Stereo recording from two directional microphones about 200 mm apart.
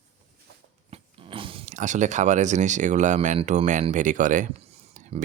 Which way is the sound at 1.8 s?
40° right (ahead or behind).